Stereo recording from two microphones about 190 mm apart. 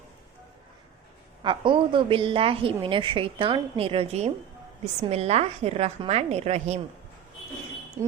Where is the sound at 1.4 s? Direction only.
25° right (ahead or behind).